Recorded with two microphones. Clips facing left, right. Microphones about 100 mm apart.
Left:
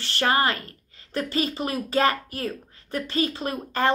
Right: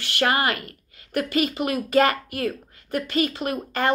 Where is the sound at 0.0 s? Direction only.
30° left (ahead or behind).